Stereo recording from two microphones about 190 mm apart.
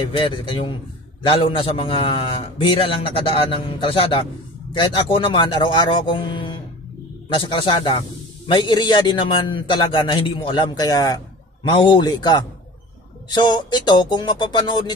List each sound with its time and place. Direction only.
0.1 s a man's voice: 30° left (ahead or behind)